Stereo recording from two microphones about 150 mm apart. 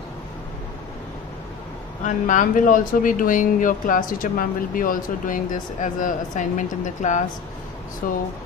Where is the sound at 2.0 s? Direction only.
60° left (ahead or behind).